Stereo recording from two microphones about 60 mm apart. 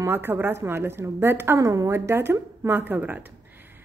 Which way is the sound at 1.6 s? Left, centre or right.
Right.